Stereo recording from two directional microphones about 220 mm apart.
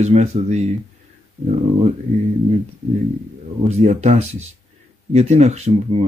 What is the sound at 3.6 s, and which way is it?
Speech, 30° right (ahead or behind).